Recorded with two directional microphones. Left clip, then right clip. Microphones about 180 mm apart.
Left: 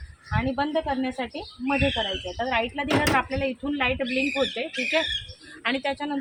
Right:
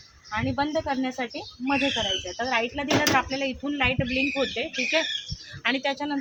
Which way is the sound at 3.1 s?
10° right (ahead or behind).